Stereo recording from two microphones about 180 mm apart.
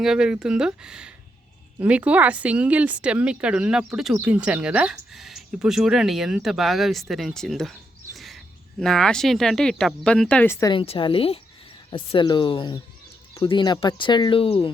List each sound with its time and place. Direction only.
0.0 s speech: 5° right (ahead or behind)
8.1 s a sound: centre (ahead or behind)
8.8 s speech: 5° left (ahead or behind); by 14.7 s 30° left (ahead or behind)